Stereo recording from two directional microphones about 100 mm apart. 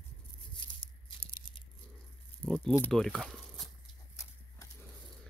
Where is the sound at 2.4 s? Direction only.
5° left (ahead or behind).